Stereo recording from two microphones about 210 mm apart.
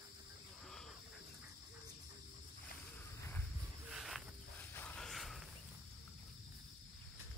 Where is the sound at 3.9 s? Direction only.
Centre (ahead or behind).